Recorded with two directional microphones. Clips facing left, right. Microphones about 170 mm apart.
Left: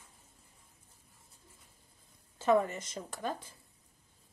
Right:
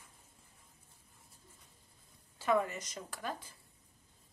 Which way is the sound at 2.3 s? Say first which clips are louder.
Left 4 dB; 25° left (ahead or behind).